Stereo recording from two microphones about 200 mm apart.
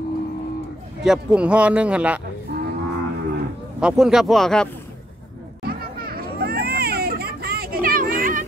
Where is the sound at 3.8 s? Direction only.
Centre (ahead or behind).